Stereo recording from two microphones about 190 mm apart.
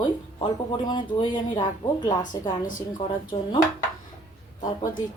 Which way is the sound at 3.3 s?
25° left (ahead or behind).